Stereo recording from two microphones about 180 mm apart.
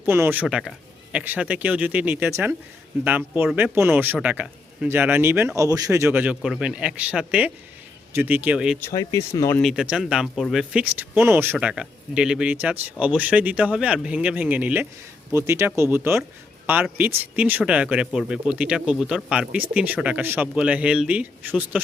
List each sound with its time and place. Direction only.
0.0 s speech: 10° right (ahead or behind)
8.8 s speech: 15° left (ahead or behind)
9.6 s speech: centre (ahead or behind)